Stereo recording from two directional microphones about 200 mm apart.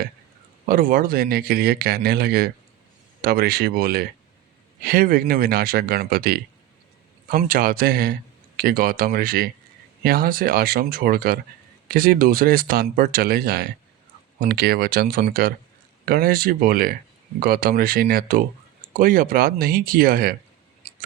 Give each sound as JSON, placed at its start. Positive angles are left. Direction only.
{"t": 0.7, "sound": "speech", "side_deg": -45}